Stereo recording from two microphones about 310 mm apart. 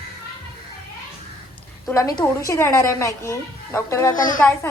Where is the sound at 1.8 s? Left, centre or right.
Centre.